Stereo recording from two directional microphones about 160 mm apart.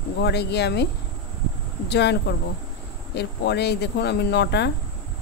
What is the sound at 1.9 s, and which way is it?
Speech, 90° left.